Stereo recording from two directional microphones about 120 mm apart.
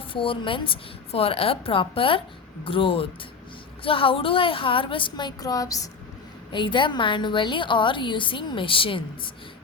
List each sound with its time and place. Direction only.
0.1 s a woman's voice: 45° left (ahead or behind); by 5.9 s 30° left (ahead or behind)
6.5 s a woman's voice: 40° left (ahead or behind)